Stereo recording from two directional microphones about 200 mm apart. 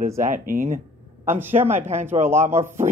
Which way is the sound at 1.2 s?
10° right (ahead or behind).